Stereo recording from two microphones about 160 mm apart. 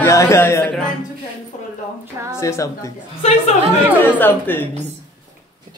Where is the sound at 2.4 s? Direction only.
15° left (ahead or behind).